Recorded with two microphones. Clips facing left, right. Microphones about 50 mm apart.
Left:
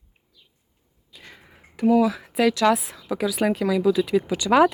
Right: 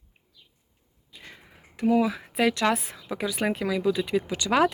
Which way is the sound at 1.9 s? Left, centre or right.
Centre.